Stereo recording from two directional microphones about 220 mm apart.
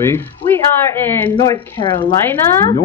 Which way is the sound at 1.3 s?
20° left (ahead or behind).